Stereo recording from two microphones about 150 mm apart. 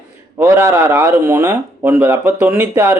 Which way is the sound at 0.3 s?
15° right (ahead or behind).